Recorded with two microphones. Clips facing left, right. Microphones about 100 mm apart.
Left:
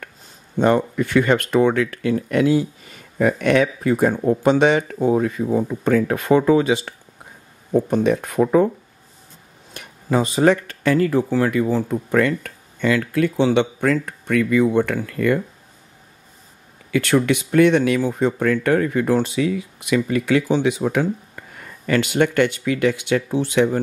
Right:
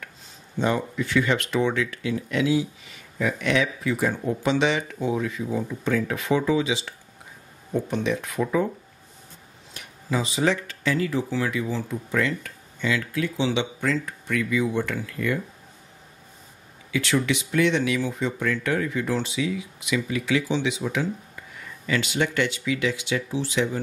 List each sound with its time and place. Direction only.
0.6 s speech: 55° left (ahead or behind)
9.8 s speech: 50° left (ahead or behind)
16.9 s speech: 50° left (ahead or behind)